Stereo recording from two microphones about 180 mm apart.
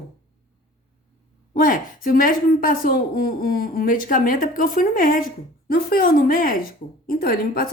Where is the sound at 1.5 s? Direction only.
50° left (ahead or behind).